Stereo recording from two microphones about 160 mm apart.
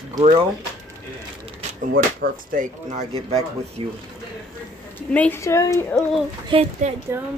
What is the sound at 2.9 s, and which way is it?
Speech, 40° right (ahead or behind).